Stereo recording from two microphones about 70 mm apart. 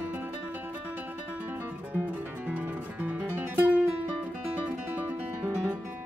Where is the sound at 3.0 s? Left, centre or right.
Right.